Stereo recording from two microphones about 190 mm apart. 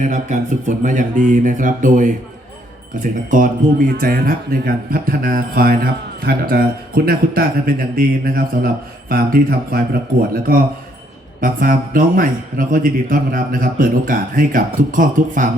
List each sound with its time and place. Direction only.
0.0 s speech: 40° right (ahead or behind)